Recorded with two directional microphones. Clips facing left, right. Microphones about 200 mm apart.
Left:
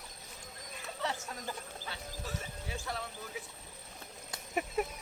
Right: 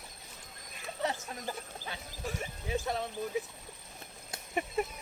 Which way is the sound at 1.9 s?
15° right (ahead or behind).